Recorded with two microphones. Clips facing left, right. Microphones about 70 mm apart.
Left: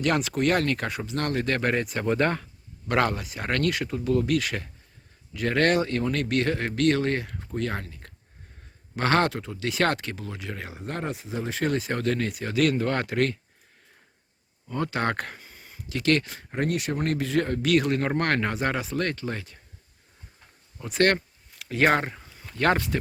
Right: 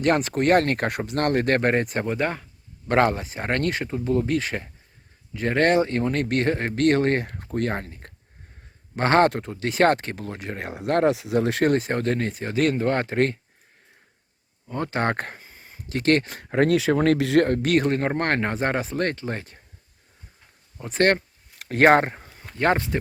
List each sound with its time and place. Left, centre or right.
0.0 s speech: right
2.0 s speech: centre
2.8 s speech: right
10.8 s speech: right
11.6 s speech: right
14.7 s speech: right
16.4 s speech: right
17.4 s speech: right
19.1 s speech: right
20.7 s speech: right
21.6 s a sound: right
22.5 s speech: right